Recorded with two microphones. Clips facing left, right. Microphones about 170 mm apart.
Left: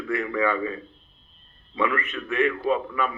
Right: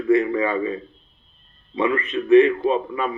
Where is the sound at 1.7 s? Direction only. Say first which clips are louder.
Right 4 dB; 25° right (ahead or behind).